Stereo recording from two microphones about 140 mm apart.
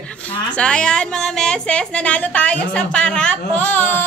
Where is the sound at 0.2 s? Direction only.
5° left (ahead or behind).